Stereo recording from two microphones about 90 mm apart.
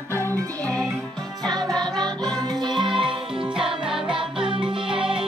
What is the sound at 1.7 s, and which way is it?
Music, 5° left (ahead or behind).